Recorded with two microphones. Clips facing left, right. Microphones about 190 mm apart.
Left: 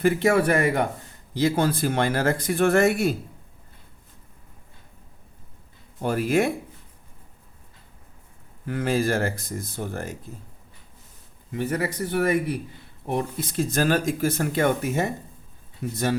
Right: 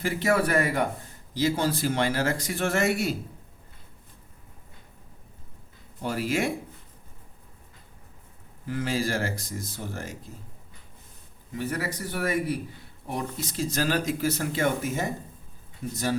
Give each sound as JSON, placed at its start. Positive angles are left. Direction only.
{"t": 0.0, "sound": "speech", "side_deg": 55}
{"t": 6.0, "sound": "speech", "side_deg": 50}
{"t": 8.6, "sound": "speech", "side_deg": 55}
{"t": 11.5, "sound": "speech", "side_deg": 55}